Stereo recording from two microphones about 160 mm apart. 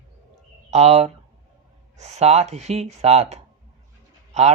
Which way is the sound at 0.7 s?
40° right (ahead or behind).